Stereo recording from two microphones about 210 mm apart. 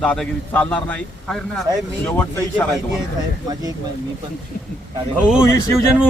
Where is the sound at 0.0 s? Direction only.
5° left (ahead or behind).